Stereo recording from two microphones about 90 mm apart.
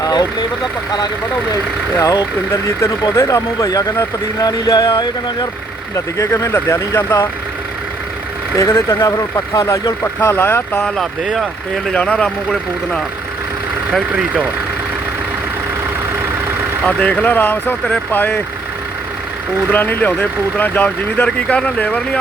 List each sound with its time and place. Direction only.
0.0 s vehicle: 45° left (ahead or behind)
2.0 s speech: 40° left (ahead or behind)
6.1 s speech: 35° left (ahead or behind)
8.5 s speech: 35° left (ahead or behind)
10.3 s speech: 20° left (ahead or behind)
10.8 s speech: 5° left (ahead or behind)
16.8 s speech: 15° left (ahead or behind)
19.7 s speech: 20° left (ahead or behind)